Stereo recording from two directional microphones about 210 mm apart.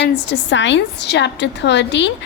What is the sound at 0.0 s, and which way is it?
A woman's voice, 60° left (ahead or behind).